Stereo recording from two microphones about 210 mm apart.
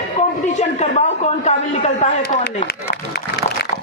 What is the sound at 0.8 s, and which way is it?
A woman's voice, 35° left (ahead or behind).